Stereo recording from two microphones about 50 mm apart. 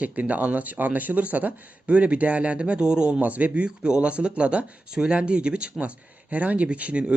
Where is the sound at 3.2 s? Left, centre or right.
Right.